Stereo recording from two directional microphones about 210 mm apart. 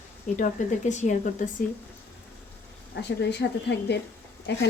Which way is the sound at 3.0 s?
55° left (ahead or behind).